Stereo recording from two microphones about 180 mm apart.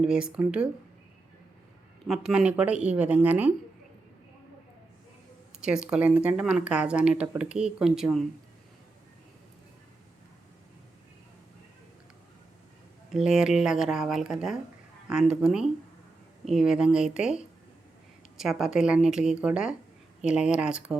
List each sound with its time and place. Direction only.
0.0 s speech: 5° right (ahead or behind)
2.0 s speech: 5° right (ahead or behind)
5.5 s speech: 5° right (ahead or behind)
13.1 s speech: centre (ahead or behind)